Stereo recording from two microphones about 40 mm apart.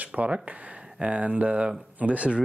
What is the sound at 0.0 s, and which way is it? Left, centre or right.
Speech, right.